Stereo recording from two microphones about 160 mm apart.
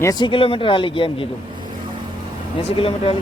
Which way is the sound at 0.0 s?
25° left (ahead or behind).